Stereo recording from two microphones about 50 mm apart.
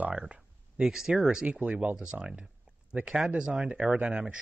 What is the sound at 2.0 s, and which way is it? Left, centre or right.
Speech, centre.